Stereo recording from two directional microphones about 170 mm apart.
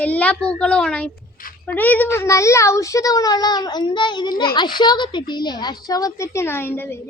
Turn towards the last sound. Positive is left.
turn(degrees=15)  # may be behind; listen again after turning